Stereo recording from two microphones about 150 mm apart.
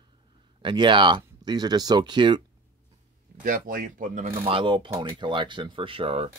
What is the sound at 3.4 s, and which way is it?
Speech, 65° right (ahead or behind).